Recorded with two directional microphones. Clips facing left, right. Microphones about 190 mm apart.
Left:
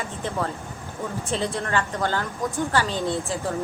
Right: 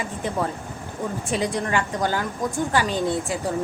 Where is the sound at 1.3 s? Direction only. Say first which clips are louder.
Right 2 dB; 15° right (ahead or behind).